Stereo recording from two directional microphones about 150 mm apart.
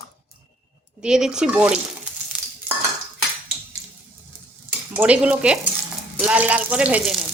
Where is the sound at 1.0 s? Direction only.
5° right (ahead or behind).